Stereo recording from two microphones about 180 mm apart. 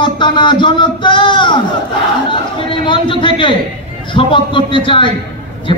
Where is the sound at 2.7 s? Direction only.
25° left (ahead or behind).